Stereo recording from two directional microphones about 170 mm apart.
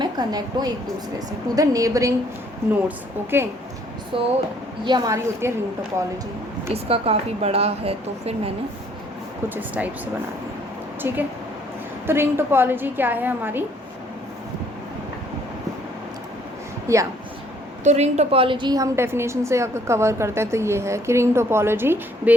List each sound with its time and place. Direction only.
0.0 s a woman's voice: 25° right (ahead or behind)
3.2 s a woman's voice: 15° right (ahead or behind)
4.1 s a woman's voice: 30° right (ahead or behind)
6.7 s a woman's voice: 35° right (ahead or behind)
9.6 s a woman's voice: 10° right (ahead or behind)
11.0 s a woman's voice: 15° right (ahead or behind)
16.9 s a woman's voice: 20° right (ahead or behind)
17.8 s a woman's voice: 40° right (ahead or behind); by 22.4 s 10° right (ahead or behind)